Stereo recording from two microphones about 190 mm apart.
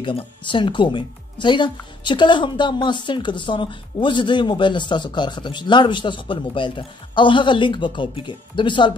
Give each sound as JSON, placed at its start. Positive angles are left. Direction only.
{"t": 0.0, "sound": "speech", "side_deg": 25}